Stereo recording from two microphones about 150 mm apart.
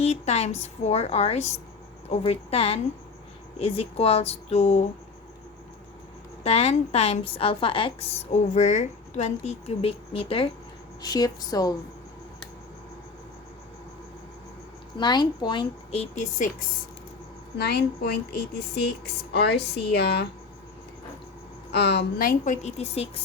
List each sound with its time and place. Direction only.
0.0 s a woman's voice: 45° left (ahead or behind)
6.4 s a woman's voice: 45° left (ahead or behind)
11.0 s a woman's voice: 25° left (ahead or behind)
14.9 s speech: 30° left (ahead or behind)
16.1 s speech: 60° left (ahead or behind)
17.6 s a woman's voice: 90° left
21.7 s a woman's voice: 90° left; by 22.5 s 75° left (ahead or behind)
22.6 s a woman's voice: 45° left (ahead or behind)